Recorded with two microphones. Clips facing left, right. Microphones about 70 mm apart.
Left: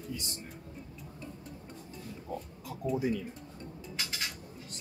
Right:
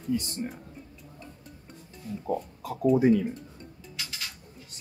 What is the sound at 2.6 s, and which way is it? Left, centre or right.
Speech, right.